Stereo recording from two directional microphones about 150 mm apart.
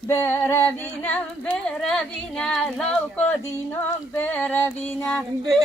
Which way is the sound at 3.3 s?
10° left (ahead or behind).